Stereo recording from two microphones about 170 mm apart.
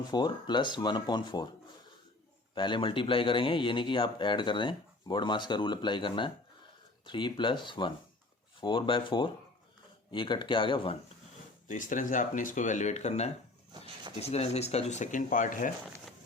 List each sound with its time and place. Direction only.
0.1 s speech: 25° left (ahead or behind)
2.6 s speech: 30° left (ahead or behind)
11.7 s speech: 50° left (ahead or behind)